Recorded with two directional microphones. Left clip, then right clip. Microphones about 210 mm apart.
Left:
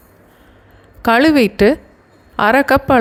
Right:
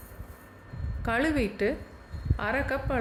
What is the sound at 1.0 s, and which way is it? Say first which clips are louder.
A woman's voice: left 16 dB; 40° left (ahead or behind).